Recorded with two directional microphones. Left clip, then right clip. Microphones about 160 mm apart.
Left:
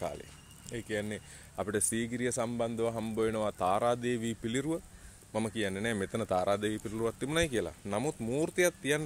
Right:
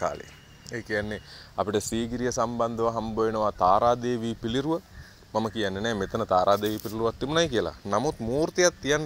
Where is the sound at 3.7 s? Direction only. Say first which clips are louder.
Right 7 dB; 30° left (ahead or behind).